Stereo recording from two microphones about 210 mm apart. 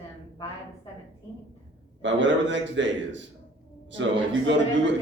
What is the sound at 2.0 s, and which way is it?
A man's voice, 60° right (ahead or behind).